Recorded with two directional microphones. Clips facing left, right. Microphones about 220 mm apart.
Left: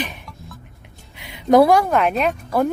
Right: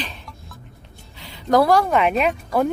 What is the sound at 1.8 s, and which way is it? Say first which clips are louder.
Speech: even; centre (ahead or behind).